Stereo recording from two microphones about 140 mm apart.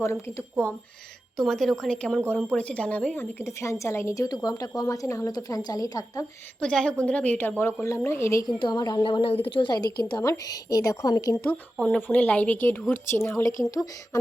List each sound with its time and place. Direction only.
0.0 s a woman's voice: 20° left (ahead or behind)
1.4 s a woman's voice: centre (ahead or behind); by 6.2 s 25° left (ahead or behind)
6.6 s a woman's voice: 5° left (ahead or behind); by 9.0 s 30° left (ahead or behind)
9.0 s a woman's voice: 40° left (ahead or behind); by 13.7 s 25° left (ahead or behind)